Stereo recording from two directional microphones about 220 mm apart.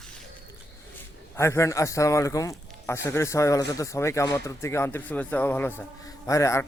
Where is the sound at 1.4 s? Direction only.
10° left (ahead or behind).